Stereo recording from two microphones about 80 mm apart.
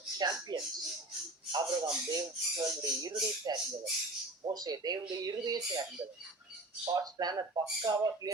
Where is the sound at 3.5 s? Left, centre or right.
Right.